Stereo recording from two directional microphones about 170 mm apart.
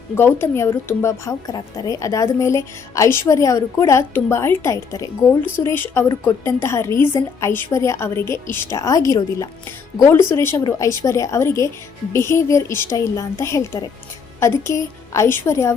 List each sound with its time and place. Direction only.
0.2 s a woman's voice: 15° left (ahead or behind)